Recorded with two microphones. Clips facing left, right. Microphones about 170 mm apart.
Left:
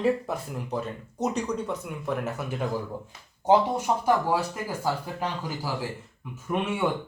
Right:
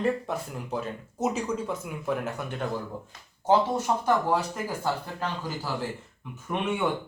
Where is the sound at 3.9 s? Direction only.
15° left (ahead or behind).